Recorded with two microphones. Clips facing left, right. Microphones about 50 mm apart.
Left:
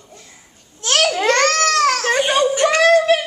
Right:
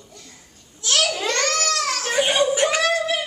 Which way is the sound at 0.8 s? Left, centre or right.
Left.